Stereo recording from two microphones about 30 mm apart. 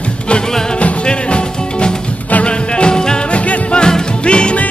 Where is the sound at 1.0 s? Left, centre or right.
Left.